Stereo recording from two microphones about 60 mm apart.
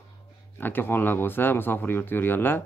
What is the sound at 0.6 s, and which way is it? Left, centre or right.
Speech, left.